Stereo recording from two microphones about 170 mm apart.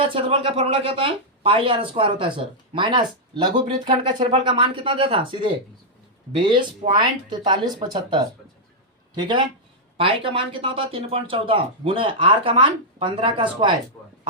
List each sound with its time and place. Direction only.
0.0 s speech: 30° right (ahead or behind)